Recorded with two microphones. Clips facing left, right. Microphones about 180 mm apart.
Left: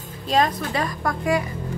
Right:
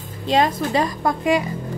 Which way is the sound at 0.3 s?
25° right (ahead or behind).